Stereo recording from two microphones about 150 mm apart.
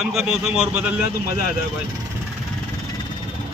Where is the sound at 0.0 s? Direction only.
5° right (ahead or behind).